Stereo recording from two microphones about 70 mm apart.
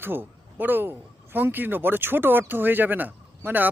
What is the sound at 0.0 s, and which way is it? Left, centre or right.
A man's voice, right.